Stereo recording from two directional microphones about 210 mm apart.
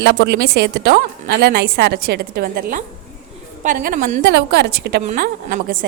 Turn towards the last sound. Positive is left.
turn(degrees=-40)  # may be behind; listen again after turning